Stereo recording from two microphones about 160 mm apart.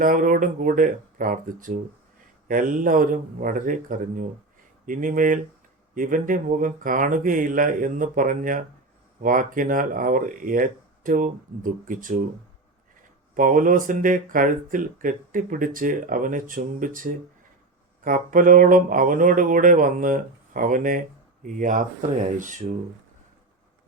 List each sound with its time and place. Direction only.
0.0 s speech: 60° right (ahead or behind)
13.3 s speech: 60° right (ahead or behind)